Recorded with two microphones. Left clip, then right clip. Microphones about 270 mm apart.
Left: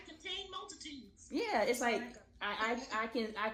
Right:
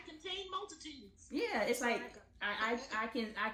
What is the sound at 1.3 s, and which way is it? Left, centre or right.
Speech, centre.